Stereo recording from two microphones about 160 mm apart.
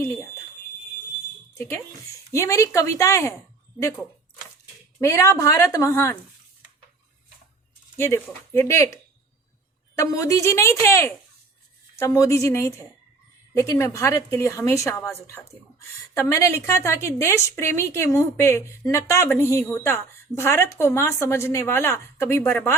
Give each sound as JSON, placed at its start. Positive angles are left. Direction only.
{"t": 2.3, "sound": "a woman's voice", "side_deg": 20}
{"t": 4.9, "sound": "a woman's voice", "side_deg": 20}
{"t": 7.9, "sound": "a woman's voice", "side_deg": 15}
{"t": 10.0, "sound": "a woman's voice", "side_deg": 20}